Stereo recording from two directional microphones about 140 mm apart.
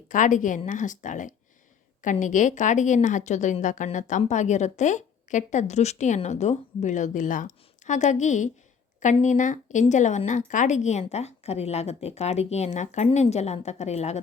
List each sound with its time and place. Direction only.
0.1 s a woman's voice: 65° left (ahead or behind)